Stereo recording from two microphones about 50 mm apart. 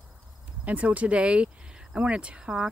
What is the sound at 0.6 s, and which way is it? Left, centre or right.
Speech, right.